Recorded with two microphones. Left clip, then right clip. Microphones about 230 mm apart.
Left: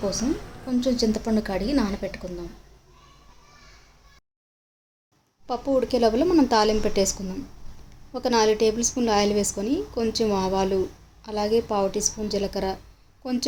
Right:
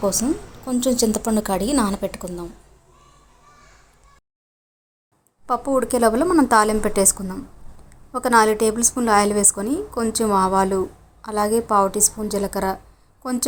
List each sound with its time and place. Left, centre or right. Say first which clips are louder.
0.0 s speech: right 5 dB; centre
5.8 s speech: right 3 dB; centre